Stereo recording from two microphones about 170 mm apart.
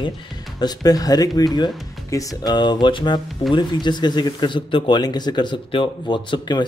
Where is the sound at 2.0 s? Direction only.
20° left (ahead or behind).